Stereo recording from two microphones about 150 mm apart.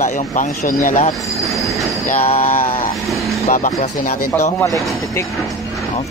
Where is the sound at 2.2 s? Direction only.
40° left (ahead or behind).